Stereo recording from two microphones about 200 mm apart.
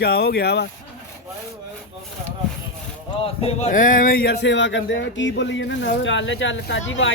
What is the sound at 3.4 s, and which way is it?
Speech, 30° left (ahead or behind).